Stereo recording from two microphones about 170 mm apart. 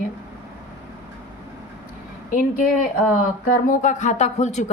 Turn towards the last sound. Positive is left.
turn(degrees=45)  # may be behind; listen again after turning